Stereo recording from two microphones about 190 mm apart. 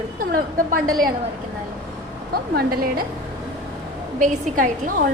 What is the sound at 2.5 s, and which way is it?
Speech, 50° right (ahead or behind).